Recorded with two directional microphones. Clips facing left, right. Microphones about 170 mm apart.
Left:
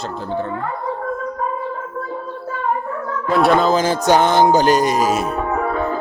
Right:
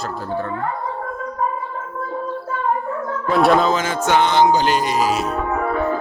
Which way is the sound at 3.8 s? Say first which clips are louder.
Left 3 dB; 35° left (ahead or behind).